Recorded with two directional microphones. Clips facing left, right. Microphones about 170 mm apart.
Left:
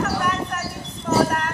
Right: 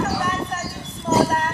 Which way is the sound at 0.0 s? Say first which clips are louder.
Even; 25° right (ahead or behind).